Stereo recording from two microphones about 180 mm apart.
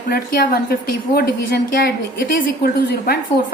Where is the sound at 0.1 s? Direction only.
60° left (ahead or behind).